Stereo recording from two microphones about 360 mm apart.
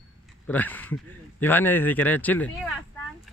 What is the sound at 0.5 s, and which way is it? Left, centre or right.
Speech, centre.